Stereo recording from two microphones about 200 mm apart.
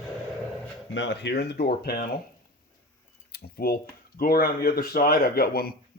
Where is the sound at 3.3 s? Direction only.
50° left (ahead or behind).